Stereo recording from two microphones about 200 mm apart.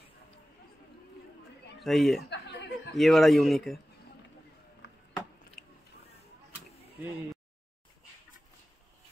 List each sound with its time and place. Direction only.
1.8 s speech: centre (ahead or behind)
2.2 s chuckle: 60° left (ahead or behind)
3.0 s speech: centre (ahead or behind)
4.8 s chop: 60° left (ahead or behind)
5.6 s biting: centre (ahead or behind)